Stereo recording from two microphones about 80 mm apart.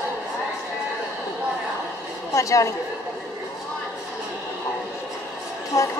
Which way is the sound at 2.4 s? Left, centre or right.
Left.